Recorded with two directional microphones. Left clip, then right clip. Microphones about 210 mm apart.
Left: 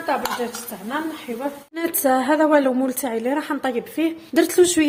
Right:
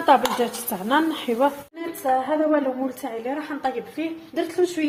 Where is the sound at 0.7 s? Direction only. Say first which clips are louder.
Right 6 dB; 35° right (ahead or behind).